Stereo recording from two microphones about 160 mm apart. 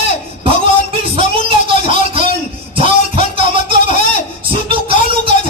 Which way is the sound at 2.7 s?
35° right (ahead or behind).